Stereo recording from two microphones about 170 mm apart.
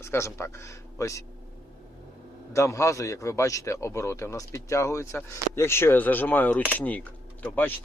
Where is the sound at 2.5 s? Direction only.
15° left (ahead or behind).